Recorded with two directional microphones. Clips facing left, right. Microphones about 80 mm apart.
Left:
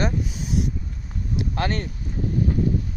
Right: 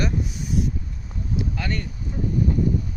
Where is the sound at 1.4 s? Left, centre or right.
Left.